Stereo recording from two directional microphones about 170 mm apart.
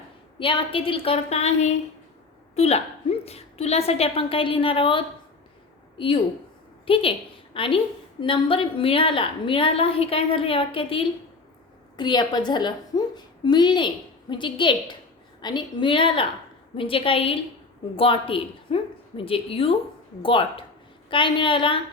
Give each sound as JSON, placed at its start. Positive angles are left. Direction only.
{"t": 0.3, "sound": "a woman's voice", "side_deg": 30}